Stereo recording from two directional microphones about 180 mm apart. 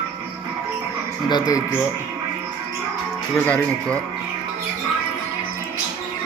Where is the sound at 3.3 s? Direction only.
5° left (ahead or behind).